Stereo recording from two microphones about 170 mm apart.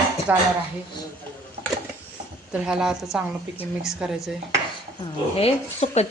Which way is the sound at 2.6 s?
5° right (ahead or behind).